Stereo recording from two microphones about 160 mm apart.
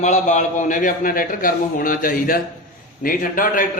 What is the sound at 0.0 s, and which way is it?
A man's voice, 50° left (ahead or behind).